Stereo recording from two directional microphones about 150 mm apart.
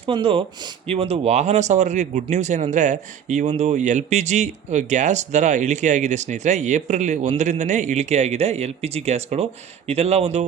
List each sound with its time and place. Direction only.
0.0 s speech: 35° right (ahead or behind)